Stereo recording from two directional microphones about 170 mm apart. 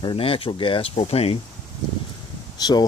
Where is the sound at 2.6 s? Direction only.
25° left (ahead or behind).